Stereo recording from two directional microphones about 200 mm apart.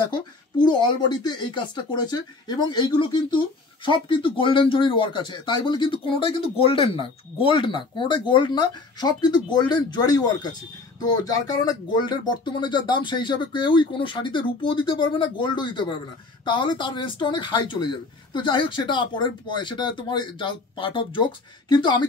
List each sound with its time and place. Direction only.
0.1 s speech: 20° left (ahead or behind)